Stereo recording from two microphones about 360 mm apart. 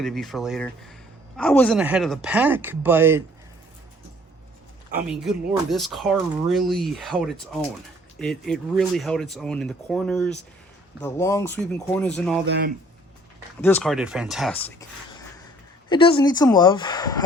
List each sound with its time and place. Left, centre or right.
0.0 s speech: centre
5.0 s speech: centre
12.5 s speech: right
13.6 s a woman's voice: centre